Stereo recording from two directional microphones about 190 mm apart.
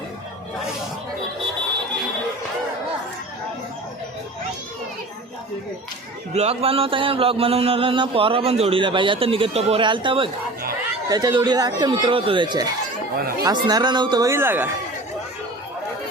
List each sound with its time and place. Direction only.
6.3 s speech: 35° right (ahead or behind); by 14.7 s 10° right (ahead or behind)